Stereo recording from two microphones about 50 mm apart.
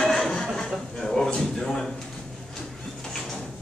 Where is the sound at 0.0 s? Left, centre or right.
Centre.